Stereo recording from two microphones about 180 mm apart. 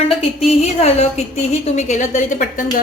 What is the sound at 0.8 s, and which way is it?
A woman's voice, 35° left (ahead or behind).